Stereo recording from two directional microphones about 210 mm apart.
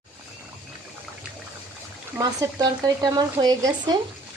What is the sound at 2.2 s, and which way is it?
Speech, 20° right (ahead or behind).